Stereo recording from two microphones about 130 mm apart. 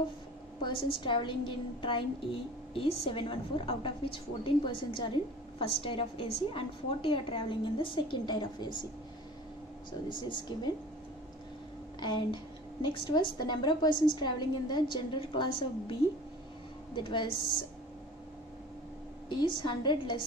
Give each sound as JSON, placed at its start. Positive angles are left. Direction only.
{"t": 0.6, "sound": "a woman's voice", "side_deg": 40}
{"t": 10.0, "sound": "a woman's voice", "side_deg": 35}
{"t": 12.0, "sound": "a woman's voice", "side_deg": 35}
{"t": 16.9, "sound": "a woman's voice", "side_deg": 35}
{"t": 19.2, "sound": "a woman's voice", "side_deg": 35}